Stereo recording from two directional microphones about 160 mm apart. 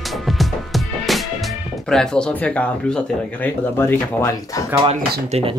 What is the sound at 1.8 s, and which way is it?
Speech, 5° left (ahead or behind).